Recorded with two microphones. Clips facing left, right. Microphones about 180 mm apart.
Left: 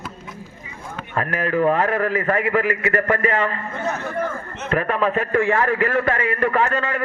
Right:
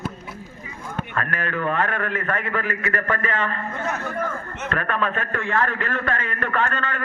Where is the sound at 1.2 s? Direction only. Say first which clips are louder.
Left 7 dB; 25° left (ahead or behind).